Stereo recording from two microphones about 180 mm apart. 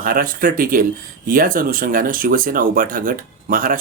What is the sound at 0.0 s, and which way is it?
Speech, 50° right (ahead or behind).